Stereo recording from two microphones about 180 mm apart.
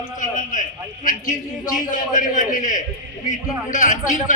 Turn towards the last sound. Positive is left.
turn(degrees=45)  # may be behind; listen again after turning